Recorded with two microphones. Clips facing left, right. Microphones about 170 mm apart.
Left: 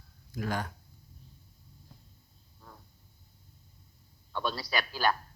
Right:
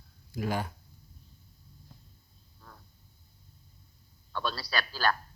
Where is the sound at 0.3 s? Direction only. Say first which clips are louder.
Right 2 dB; 10° right (ahead or behind).